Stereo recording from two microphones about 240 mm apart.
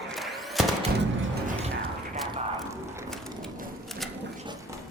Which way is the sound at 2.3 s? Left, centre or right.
Centre.